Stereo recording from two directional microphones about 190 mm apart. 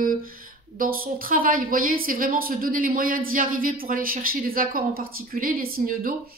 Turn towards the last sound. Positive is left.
turn(degrees=-50)  # may be behind; listen again after turning